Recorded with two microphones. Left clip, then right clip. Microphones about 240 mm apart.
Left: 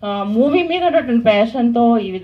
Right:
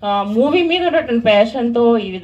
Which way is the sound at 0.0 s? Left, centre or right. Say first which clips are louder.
Right 2 dB; right.